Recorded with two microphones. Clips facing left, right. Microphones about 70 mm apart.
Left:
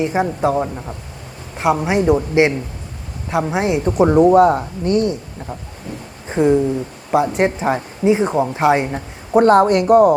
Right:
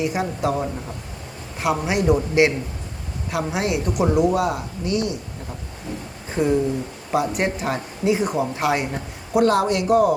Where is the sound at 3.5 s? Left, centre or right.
Left.